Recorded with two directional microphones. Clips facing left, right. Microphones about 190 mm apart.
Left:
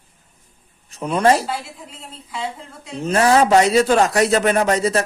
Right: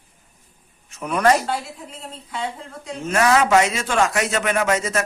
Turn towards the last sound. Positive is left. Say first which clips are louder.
# left 4 dB
turn(degrees=35)  # may be behind; listen again after turning